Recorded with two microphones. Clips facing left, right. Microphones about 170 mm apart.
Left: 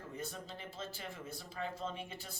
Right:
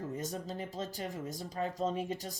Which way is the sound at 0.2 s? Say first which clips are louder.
Right 7 dB; 40° right (ahead or behind).